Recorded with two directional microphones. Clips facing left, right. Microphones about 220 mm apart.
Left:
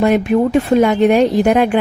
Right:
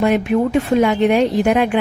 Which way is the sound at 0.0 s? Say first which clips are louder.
Left 3 dB; 40° left (ahead or behind).